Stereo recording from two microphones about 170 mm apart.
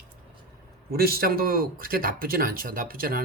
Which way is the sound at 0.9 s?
65° right (ahead or behind).